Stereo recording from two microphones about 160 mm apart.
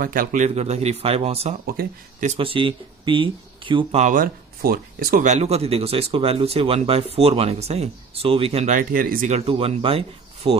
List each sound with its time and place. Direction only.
0.0 s speech: 60° right (ahead or behind); by 1.5 s 40° right (ahead or behind)
1.8 s speech: 55° right (ahead or behind)
2.3 s speech: 35° right (ahead or behind)
4.0 s speech: 60° right (ahead or behind); by 8.7 s 40° right (ahead or behind)
8.7 s speech: 60° right (ahead or behind)
9.3 s speech: 40° right (ahead or behind)